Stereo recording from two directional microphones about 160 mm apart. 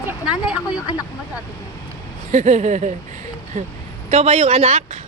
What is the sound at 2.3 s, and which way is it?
A woman's voice, 50° right (ahead or behind).